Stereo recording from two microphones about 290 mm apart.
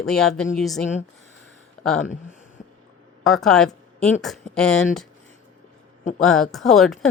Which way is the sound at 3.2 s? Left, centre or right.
Centre.